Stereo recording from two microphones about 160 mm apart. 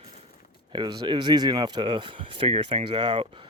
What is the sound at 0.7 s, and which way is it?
Speech, 30° right (ahead or behind).